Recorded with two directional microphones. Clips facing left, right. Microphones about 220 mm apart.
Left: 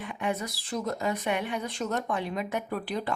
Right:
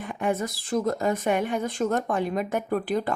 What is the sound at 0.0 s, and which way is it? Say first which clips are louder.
A woman's voice: right 5 dB; 45° right (ahead or behind).